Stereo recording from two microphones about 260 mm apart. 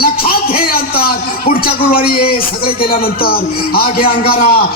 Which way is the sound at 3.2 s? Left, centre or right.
Left.